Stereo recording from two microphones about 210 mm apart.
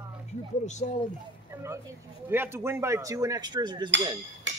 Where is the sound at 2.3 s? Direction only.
10° right (ahead or behind).